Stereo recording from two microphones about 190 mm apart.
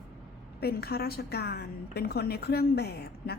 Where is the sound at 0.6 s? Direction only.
55° left (ahead or behind).